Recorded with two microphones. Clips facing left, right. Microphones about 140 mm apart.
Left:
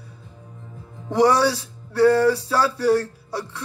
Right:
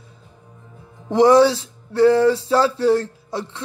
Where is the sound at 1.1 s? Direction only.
20° right (ahead or behind).